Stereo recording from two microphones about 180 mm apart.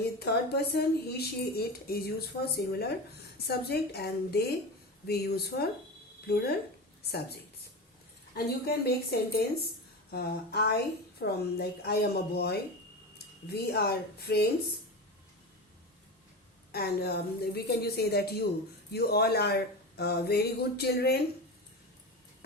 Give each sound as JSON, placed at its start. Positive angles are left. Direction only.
{"t": 0.2, "sound": "a woman's voice", "side_deg": 65}
{"t": 8.6, "sound": "a woman's voice", "side_deg": 60}
{"t": 16.7, "sound": "a woman's voice", "side_deg": 60}